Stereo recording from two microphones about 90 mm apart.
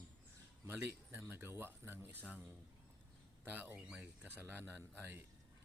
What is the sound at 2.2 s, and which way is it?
Speech, 15° right (ahead or behind).